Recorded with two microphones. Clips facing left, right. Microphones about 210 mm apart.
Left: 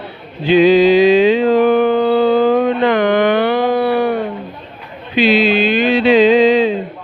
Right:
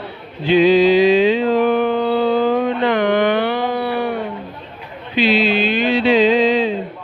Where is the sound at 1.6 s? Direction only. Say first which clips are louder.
Left 4 dB; 45° left (ahead or behind).